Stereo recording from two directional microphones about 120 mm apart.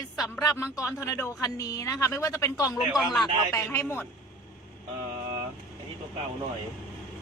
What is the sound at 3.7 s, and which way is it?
Speech, 20° left (ahead or behind).